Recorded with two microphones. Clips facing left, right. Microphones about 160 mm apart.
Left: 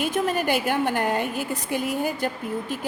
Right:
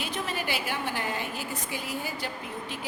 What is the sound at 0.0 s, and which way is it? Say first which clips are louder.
A woman's voice: left 9 dB; 50° left (ahead or behind).